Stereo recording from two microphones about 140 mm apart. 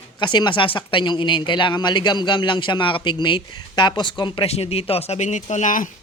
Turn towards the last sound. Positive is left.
turn(degrees=65)  # may be behind; listen again after turning